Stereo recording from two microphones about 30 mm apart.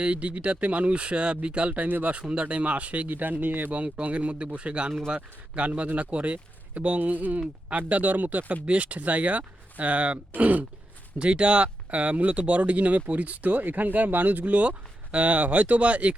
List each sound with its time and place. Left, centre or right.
0.0 s speech: right
1.7 s speech: right
2.3 s speech: right
3.1 s speech: right
4.0 s speech: right
7.0 s speech: right
8.6 s speech: right
11.2 s speech: right